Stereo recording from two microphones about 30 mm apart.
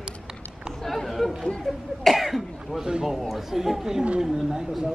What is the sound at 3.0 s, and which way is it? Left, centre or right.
Speech, centre.